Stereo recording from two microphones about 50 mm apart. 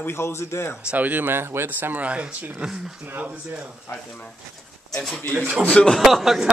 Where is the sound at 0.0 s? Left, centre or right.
Left.